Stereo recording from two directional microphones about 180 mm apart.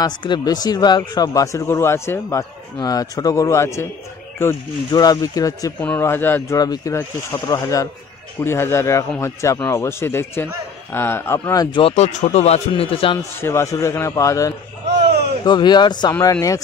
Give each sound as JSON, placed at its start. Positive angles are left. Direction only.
{"t": 0.0, "sound": "a man's voice", "side_deg": 25}
{"t": 13.4, "sound": "a man's voice", "side_deg": 15}